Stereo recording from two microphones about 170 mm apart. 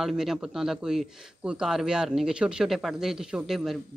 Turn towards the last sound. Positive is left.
turn(degrees=0)  # may be behind; listen again after turning